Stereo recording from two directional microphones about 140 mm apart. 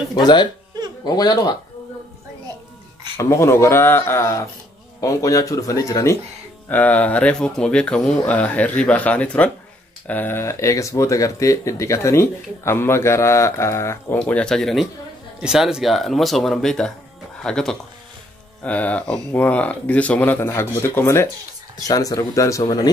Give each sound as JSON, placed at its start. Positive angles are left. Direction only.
{"t": 0.1, "sound": "speech", "side_deg": 30}
{"t": 3.2, "sound": "speech", "side_deg": 20}
{"t": 6.7, "sound": "speech", "side_deg": 10}
{"t": 14.1, "sound": "speech", "side_deg": 5}